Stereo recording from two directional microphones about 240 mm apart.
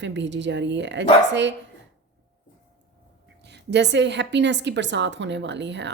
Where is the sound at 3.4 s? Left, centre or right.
Right.